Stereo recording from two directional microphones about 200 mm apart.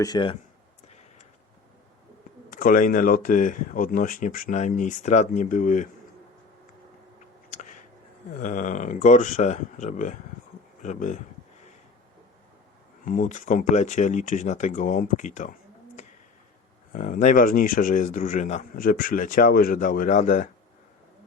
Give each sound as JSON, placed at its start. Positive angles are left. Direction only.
{"t": 0.0, "sound": "speech", "side_deg": 20}
{"t": 2.5, "sound": "speech", "side_deg": 45}
{"t": 7.5, "sound": "a sound", "side_deg": 40}
{"t": 8.3, "sound": "speech", "side_deg": 40}
{"t": 13.1, "sound": "speech", "side_deg": 40}
{"t": 16.0, "sound": "a sound", "side_deg": 35}
{"t": 16.9, "sound": "speech", "side_deg": 40}